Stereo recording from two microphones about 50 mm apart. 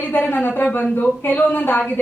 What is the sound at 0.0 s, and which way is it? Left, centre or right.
Speech, left.